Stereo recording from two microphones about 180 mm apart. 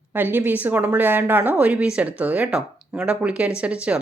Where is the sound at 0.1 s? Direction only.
10° right (ahead or behind).